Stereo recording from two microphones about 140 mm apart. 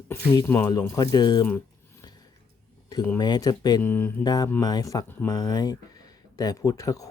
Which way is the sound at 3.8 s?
15° left (ahead or behind).